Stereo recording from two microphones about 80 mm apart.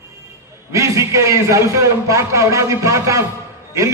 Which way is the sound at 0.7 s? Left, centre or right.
Right.